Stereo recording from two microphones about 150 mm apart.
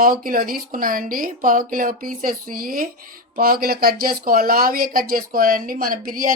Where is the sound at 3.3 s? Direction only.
80° right.